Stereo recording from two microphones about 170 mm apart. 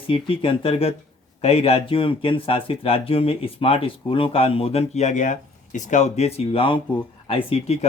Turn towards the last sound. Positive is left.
turn(degrees=35)  # may be behind; listen again after turning